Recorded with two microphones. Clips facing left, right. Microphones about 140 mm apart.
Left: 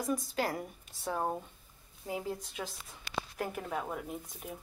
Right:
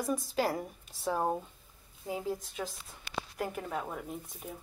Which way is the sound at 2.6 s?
Centre (ahead or behind).